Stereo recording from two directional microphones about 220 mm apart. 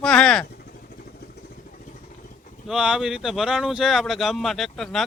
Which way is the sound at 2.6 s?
5° right (ahead or behind).